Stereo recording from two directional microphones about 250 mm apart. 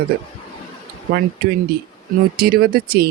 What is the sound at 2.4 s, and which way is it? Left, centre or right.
Speech, right.